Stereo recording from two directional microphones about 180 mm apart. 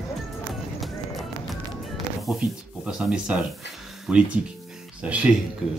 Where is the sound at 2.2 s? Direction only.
5° right (ahead or behind).